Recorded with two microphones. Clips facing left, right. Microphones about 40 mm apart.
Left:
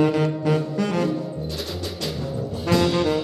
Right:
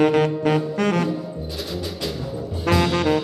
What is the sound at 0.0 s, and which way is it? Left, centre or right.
Saxophone, right.